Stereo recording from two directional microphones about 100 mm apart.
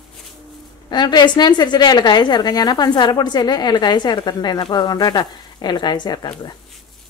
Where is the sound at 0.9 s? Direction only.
50° left (ahead or behind).